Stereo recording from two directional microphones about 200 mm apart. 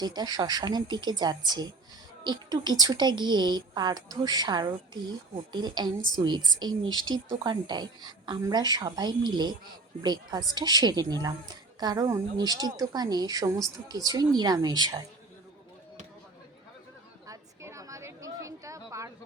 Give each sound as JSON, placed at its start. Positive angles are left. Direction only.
{"t": 0.0, "sound": "a woman's voice", "side_deg": -20}
{"t": 17.2, "sound": "chatter", "side_deg": -15}